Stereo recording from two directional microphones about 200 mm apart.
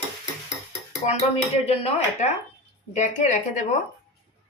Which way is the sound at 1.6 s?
35° left (ahead or behind).